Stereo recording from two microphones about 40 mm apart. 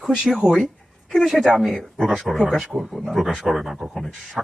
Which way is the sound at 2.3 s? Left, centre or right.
Centre.